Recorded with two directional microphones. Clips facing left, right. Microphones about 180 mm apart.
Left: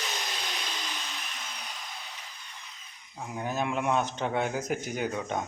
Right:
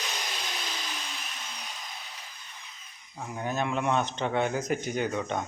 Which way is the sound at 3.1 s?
5° left (ahead or behind).